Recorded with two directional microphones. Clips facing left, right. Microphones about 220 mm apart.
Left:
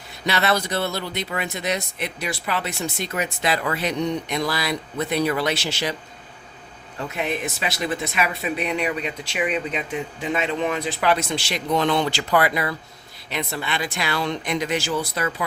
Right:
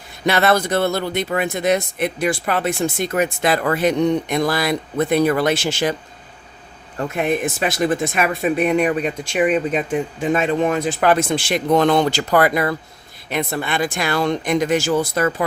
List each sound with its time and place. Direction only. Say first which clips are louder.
0.3 s speech: right 6 dB; 50° right (ahead or behind)
7.1 s speech: right 6 dB; 50° right (ahead or behind)